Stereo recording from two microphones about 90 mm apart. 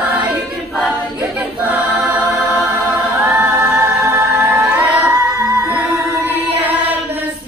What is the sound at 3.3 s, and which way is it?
A capella, 20° right (ahead or behind).